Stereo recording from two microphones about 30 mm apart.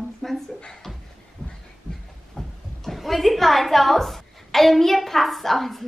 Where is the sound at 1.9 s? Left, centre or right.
Left.